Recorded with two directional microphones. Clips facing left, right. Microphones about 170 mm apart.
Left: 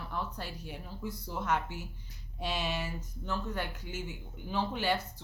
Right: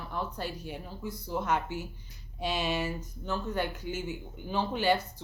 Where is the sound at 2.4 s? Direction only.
Centre (ahead or behind).